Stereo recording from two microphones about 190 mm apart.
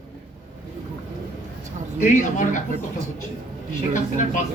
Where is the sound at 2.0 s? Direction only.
40° left (ahead or behind).